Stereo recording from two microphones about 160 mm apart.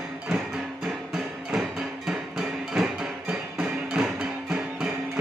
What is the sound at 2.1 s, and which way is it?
Music, centre (ahead or behind).